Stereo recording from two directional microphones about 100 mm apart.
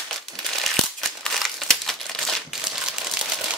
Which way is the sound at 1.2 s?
5° left (ahead or behind).